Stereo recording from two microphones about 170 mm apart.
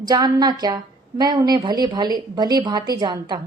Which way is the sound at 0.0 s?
25° right (ahead or behind).